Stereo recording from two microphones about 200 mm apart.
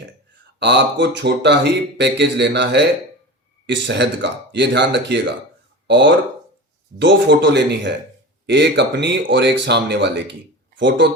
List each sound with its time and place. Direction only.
0.6 s speech: 60° right (ahead or behind)